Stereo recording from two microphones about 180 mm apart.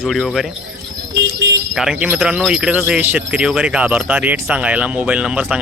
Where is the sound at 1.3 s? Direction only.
75° right (ahead or behind).